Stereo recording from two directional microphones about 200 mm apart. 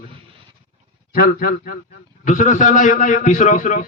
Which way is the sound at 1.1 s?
50° left (ahead or behind).